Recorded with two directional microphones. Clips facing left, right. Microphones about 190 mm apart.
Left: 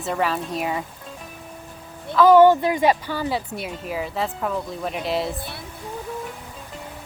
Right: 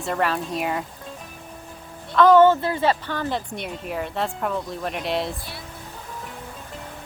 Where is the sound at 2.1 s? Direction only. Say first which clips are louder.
Left 1 dB; 10° left (ahead or behind).